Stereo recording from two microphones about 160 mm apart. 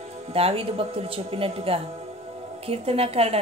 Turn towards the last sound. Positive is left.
turn(degrees=-40)  # may be behind; listen again after turning